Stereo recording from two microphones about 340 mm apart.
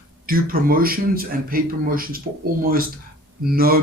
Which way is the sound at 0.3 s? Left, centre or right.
Right.